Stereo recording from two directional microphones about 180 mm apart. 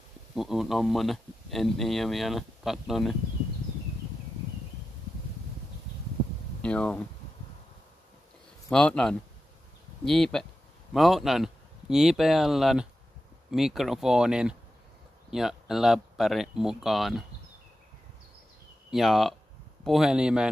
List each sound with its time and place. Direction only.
0.3 s speech: centre (ahead or behind)
6.6 s speech: 5° left (ahead or behind)
8.6 s speech: 5° left (ahead or behind)
18.9 s speech: centre (ahead or behind)